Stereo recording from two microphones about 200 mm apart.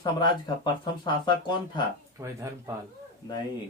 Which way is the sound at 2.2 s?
15° right (ahead or behind).